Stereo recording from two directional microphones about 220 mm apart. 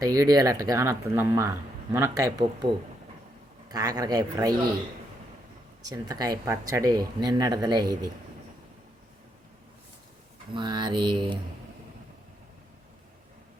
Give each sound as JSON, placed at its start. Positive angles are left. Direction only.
{"t": 0.0, "sound": "speech", "side_deg": -15}
{"t": 3.7, "sound": "speech", "side_deg": -15}
{"t": 5.9, "sound": "speech", "side_deg": -15}
{"t": 10.5, "sound": "mantra", "side_deg": -20}